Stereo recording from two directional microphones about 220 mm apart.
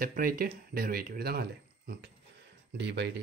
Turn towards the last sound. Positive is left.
turn(degrees=-50)  # may be behind; listen again after turning